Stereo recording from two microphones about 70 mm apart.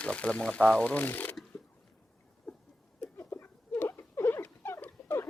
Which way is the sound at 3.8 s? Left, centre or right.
Left.